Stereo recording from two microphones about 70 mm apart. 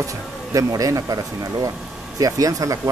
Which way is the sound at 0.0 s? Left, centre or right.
Right.